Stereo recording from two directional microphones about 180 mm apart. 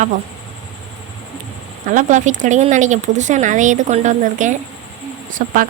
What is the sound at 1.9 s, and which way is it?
Speech, 45° right (ahead or behind).